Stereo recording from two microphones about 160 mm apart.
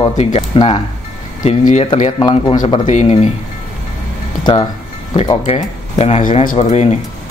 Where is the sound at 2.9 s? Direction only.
45° left (ahead or behind).